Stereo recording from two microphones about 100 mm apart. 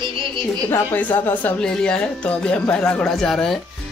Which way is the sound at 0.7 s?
20° left (ahead or behind).